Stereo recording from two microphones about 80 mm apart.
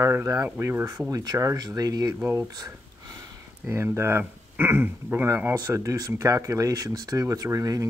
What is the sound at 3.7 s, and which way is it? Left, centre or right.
Speech, right.